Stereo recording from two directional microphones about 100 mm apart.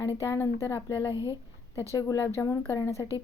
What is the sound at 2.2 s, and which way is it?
Speech, 25° left (ahead or behind).